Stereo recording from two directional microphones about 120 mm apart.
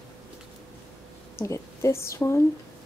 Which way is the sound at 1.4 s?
25° left (ahead or behind).